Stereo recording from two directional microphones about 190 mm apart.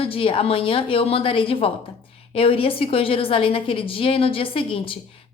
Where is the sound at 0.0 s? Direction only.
30° left (ahead or behind).